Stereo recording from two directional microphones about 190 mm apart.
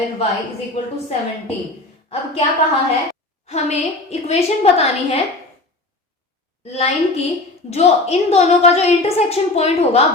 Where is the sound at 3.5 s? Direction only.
35° left (ahead or behind).